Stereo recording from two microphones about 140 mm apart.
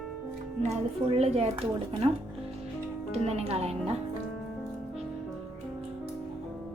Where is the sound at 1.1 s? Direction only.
45° right (ahead or behind).